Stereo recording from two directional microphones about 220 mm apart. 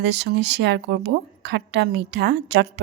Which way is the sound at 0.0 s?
50° right (ahead or behind).